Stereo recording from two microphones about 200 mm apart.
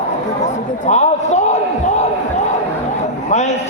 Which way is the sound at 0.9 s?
35° left (ahead or behind).